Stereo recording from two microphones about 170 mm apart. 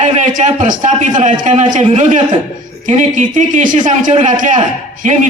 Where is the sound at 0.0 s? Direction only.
45° right (ahead or behind).